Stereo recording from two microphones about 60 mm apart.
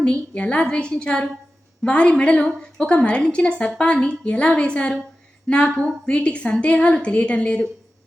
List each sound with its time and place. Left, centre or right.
0.0 s a woman's voice: centre